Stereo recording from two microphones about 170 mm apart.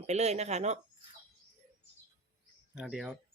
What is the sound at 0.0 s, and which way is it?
Speech, 40° right (ahead or behind).